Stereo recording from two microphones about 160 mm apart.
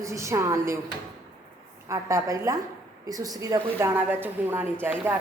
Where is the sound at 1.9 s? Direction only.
20° right (ahead or behind).